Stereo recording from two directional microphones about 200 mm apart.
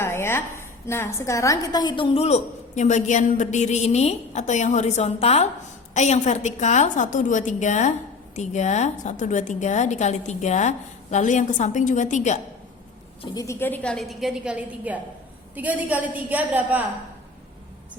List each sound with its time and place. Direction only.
0.0 s a woman's voice: 10° left (ahead or behind); by 12.4 s 35° left (ahead or behind)
13.3 s a woman's voice: 15° left (ahead or behind); by 16.8 s 10° right (ahead or behind)